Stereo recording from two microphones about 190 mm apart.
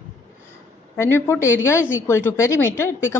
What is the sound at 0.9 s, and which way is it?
Speech, 10° left (ahead or behind).